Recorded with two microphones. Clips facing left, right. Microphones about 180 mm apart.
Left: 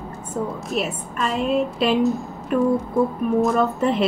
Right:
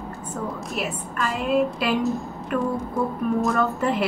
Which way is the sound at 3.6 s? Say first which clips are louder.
Left 3 dB; 20° left (ahead or behind).